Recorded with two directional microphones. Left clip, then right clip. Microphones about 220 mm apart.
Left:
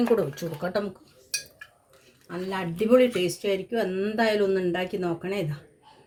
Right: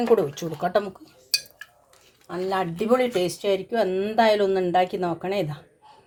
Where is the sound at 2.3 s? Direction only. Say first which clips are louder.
Right 6 dB; 40° right (ahead or behind).